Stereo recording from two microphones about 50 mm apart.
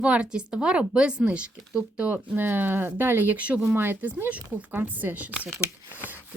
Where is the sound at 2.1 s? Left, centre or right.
Right.